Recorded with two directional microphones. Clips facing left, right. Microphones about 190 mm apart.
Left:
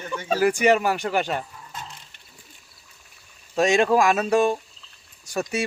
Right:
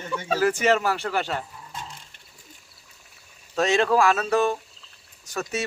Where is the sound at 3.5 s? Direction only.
10° left (ahead or behind).